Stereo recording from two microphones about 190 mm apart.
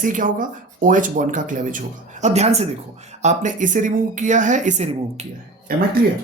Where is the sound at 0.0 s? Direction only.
45° right (ahead or behind).